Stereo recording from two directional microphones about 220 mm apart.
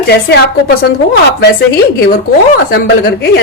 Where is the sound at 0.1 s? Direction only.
45° left (ahead or behind).